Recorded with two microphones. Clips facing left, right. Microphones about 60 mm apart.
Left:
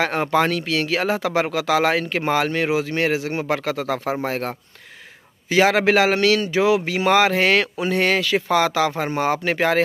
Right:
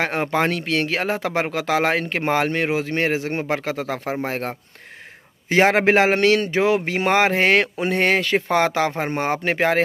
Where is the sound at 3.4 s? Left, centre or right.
Centre.